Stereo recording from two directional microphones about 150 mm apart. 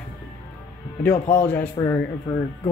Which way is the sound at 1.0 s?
15° left (ahead or behind).